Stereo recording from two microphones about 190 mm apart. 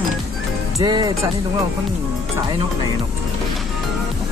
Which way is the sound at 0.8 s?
20° right (ahead or behind).